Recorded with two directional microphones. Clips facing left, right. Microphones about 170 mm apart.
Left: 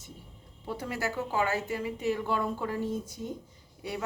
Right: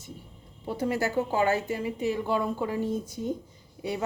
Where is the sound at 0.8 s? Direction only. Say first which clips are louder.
Right 7 dB; 30° right (ahead or behind).